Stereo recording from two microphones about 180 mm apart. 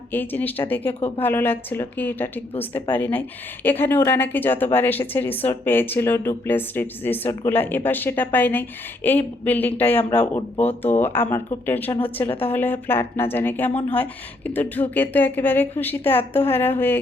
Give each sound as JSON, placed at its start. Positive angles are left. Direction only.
{"t": 0.1, "sound": "speech", "side_deg": 10}
{"t": 0.9, "sound": "a woman's voice", "side_deg": 30}
{"t": 1.2, "sound": "speech", "side_deg": 10}
{"t": 11.9, "sound": "a woman's voice", "side_deg": 30}
{"t": 12.5, "sound": "speech", "side_deg": 10}